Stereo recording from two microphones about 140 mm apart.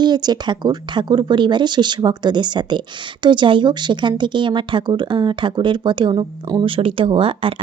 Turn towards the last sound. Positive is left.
turn(degrees=-40)  # may be behind; listen again after turning